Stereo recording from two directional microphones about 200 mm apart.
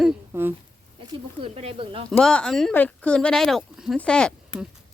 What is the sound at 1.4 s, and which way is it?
Speech, 30° right (ahead or behind).